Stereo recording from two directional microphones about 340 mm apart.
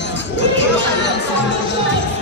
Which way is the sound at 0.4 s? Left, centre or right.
Left.